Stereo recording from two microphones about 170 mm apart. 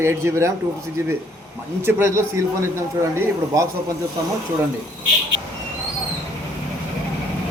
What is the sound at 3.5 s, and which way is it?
Speech, 20° right (ahead or behind).